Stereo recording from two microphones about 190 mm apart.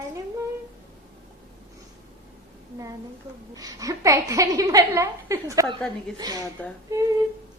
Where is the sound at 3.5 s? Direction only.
20° right (ahead or behind).